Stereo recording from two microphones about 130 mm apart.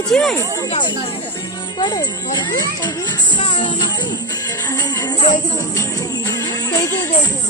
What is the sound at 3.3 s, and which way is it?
Music, 40° left (ahead or behind).